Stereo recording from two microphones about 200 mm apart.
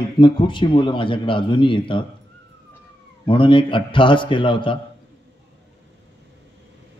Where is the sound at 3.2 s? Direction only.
25° left (ahead or behind).